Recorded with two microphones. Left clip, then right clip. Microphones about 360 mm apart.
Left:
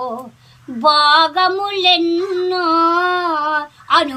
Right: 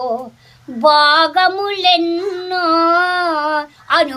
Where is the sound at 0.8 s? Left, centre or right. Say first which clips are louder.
Right 1 dB; centre.